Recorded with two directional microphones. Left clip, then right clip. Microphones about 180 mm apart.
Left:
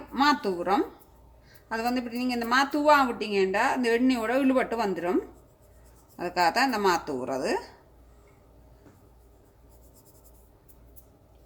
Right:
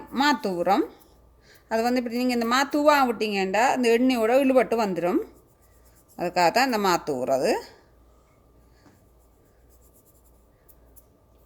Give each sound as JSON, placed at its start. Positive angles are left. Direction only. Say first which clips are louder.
{"t": 0.1, "sound": "a woman's voice", "louder": "right 1 dB", "side_deg": -60}